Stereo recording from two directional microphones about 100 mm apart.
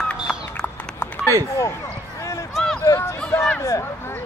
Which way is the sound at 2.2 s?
30° left (ahead or behind).